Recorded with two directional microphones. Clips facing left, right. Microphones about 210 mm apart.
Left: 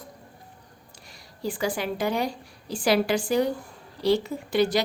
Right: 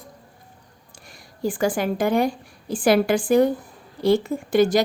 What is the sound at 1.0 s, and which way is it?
A woman's voice, 50° right (ahead or behind).